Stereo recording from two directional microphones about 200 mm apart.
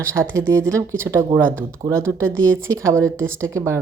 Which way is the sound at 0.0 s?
15° right (ahead or behind).